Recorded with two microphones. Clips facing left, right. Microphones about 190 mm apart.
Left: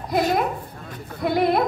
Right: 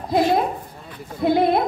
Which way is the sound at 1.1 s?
25° right (ahead or behind).